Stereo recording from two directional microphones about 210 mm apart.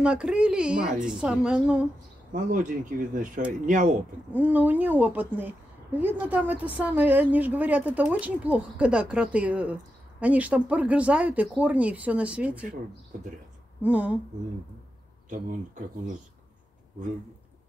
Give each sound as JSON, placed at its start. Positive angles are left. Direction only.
{"t": 0.0, "sound": "speech", "side_deg": -5}
{"t": 2.3, "sound": "speech", "side_deg": -35}
{"t": 4.3, "sound": "a woman's voice", "side_deg": -5}
{"t": 13.8, "sound": "a woman's voice", "side_deg": -5}
{"t": 15.2, "sound": "speech", "side_deg": -40}